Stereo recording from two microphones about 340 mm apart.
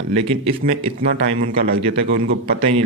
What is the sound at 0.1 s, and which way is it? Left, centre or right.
Speech, centre.